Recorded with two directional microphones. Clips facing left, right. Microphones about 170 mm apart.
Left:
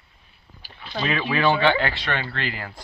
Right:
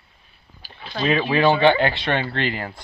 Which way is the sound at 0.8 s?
25° right (ahead or behind).